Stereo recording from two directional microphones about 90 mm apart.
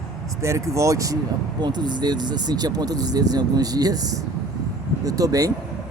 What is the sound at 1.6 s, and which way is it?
Speech, 55° right (ahead or behind).